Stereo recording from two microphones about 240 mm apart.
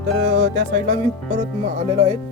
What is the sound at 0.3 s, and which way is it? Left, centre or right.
Speech, right.